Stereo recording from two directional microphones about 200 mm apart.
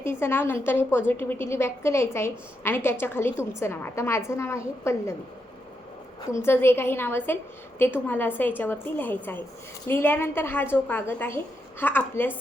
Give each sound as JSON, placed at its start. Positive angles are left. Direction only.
{"t": 0.0, "sound": "a woman's voice", "side_deg": 10}
{"t": 6.2, "sound": "a woman's voice", "side_deg": 15}